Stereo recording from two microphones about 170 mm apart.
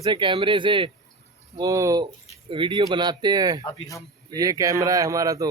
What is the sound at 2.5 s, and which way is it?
Speech, 30° right (ahead or behind).